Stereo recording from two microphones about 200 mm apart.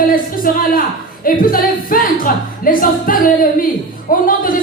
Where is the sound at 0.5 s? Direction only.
45° left (ahead or behind).